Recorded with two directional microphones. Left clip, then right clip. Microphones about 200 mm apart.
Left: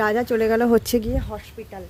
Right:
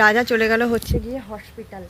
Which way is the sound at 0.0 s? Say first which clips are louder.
Right 4 dB; 15° left (ahead or behind).